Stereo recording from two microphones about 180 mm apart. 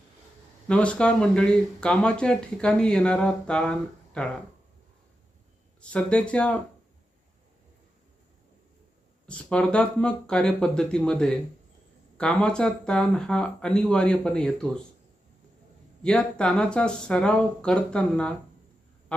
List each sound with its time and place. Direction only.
0.7 s speech: 5° left (ahead or behind)
5.8 s speech: 5° left (ahead or behind)
9.2 s speech: 5° left (ahead or behind)
16.0 s speech: 5° left (ahead or behind)